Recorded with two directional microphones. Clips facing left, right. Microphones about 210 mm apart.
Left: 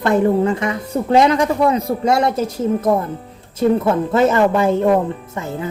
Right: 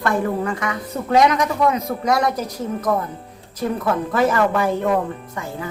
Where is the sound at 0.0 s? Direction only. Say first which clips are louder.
Left 6 dB; 25° left (ahead or behind).